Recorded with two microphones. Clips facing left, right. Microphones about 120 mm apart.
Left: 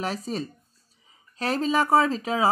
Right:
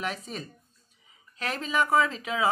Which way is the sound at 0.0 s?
35° left (ahead or behind).